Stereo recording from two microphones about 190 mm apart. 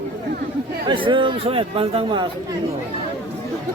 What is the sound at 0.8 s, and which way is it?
Speech, 25° right (ahead or behind).